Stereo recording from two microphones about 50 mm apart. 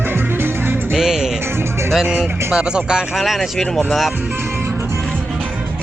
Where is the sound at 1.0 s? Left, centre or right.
Centre.